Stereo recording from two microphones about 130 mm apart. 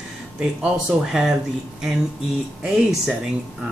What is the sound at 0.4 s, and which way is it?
Speech, 5° right (ahead or behind).